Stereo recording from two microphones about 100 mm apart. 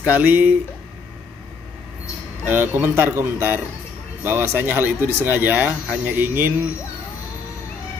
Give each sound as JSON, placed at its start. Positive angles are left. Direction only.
{"t": 0.0, "sound": "speech", "side_deg": -15}
{"t": 2.4, "sound": "speech", "side_deg": -20}